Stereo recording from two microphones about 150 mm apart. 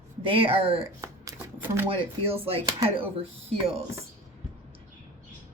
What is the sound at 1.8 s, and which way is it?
Speech, 35° right (ahead or behind).